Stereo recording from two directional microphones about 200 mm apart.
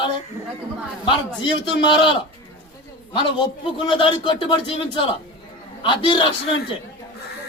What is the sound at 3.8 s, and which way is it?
A man's voice, 25° left (ahead or behind).